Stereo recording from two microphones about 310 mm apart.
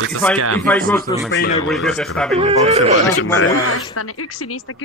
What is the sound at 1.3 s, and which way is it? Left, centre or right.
Speech, left.